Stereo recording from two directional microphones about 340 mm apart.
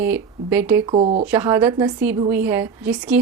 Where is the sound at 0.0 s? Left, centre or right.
Centre.